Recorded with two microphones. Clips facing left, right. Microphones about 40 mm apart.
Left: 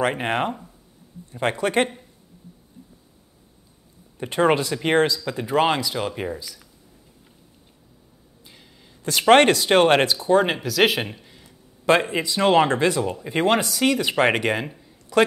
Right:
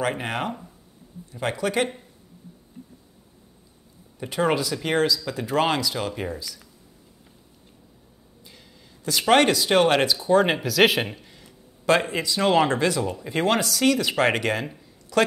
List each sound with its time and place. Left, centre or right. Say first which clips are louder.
0.0 s speech: left 4 dB; left
4.2 s speech: left 3 dB; centre
8.5 s a sound: even; centre
9.2 s speech: left 4 dB; left
10.4 s speech: right 1 dB; centre
11.8 s speech: left 2 dB; centre